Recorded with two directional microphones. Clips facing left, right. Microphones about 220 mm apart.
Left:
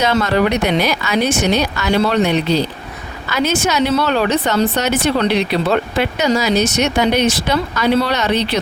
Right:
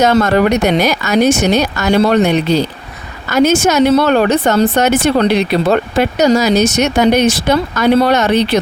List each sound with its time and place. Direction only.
0.0 s speech: 45° right (ahead or behind)